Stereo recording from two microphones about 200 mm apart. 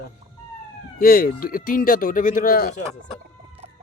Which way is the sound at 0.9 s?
45° left (ahead or behind).